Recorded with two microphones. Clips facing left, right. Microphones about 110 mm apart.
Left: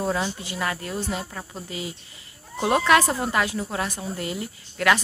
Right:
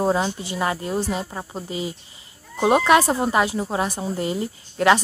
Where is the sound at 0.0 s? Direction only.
25° right (ahead or behind).